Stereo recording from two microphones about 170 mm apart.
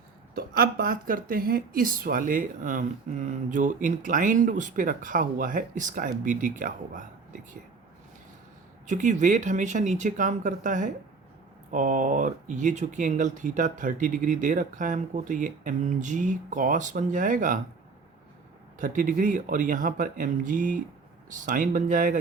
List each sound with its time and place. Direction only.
0.3 s speech: 60° right (ahead or behind)
8.9 s speech: 45° right (ahead or behind)
18.8 s speech: 50° right (ahead or behind)